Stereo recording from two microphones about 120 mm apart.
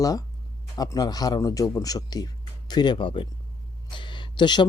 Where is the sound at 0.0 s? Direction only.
30° left (ahead or behind).